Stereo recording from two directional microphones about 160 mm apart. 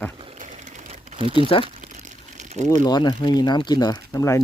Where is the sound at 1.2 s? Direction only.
35° right (ahead or behind).